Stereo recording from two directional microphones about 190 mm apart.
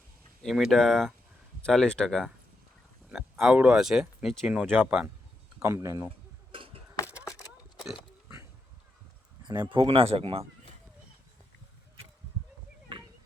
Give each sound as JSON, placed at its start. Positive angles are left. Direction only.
{"t": 0.4, "sound": "speech", "side_deg": 0}
{"t": 6.5, "sound": "a sound", "side_deg": -30}
{"t": 9.4, "sound": "speech", "side_deg": -25}